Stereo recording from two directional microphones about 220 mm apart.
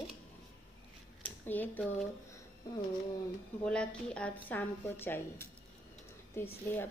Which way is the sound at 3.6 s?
5° left (ahead or behind).